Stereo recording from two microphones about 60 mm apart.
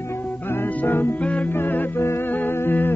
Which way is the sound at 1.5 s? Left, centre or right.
Left.